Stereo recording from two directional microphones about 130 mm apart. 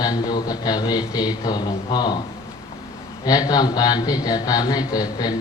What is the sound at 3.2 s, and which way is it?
A man's voice, 30° left (ahead or behind).